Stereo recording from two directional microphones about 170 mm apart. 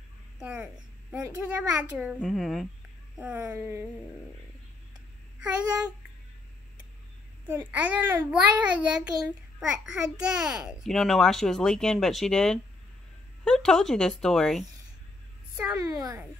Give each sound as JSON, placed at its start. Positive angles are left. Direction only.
{"t": 0.4, "sound": "a child's voice", "side_deg": -5}
{"t": 7.4, "sound": "a child's voice", "side_deg": -10}
{"t": 15.8, "sound": "a woman's voice", "side_deg": -20}